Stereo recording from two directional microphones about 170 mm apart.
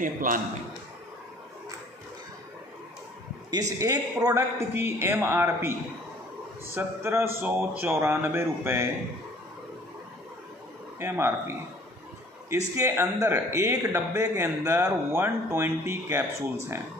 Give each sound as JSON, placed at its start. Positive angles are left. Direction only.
{"t": 0.0, "sound": "a man's voice", "side_deg": -55}
{"t": 3.4, "sound": "a man's voice", "side_deg": -20}
{"t": 11.0, "sound": "a man's voice", "side_deg": -15}